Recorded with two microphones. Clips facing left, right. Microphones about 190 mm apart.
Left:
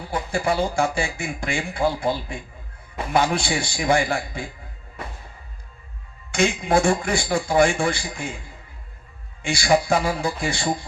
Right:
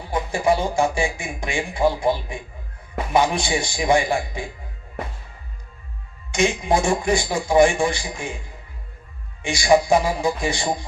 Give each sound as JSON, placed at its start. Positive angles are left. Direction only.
{"t": 0.1, "sound": "speech", "side_deg": -20}
{"t": 6.3, "sound": "speech", "side_deg": -20}
{"t": 9.4, "sound": "speech", "side_deg": -20}